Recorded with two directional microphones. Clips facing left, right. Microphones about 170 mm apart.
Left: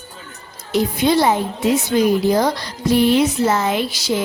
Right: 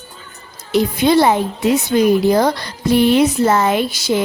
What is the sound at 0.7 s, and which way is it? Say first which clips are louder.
Speech: right 3 dB; 65° right (ahead or behind).